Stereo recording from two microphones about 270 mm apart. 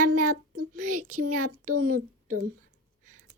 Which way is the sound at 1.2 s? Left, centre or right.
Right.